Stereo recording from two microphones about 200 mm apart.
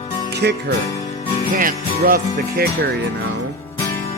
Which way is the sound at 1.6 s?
45° right (ahead or behind).